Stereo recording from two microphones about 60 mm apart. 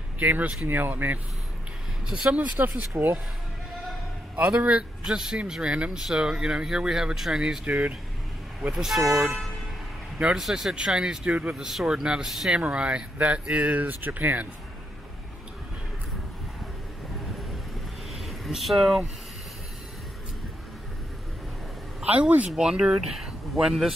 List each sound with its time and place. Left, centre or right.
0.2 s speech: right
2.3 s speech: right
2.9 s speech: right
4.4 s speech: right; by 7.6 s centre
7.6 s speech: right
8.6 s speech: centre
10.1 s speech: centre
12.5 s speech: centre
18.2 s speech: centre
22.0 s speech: right; by 23.9 s centre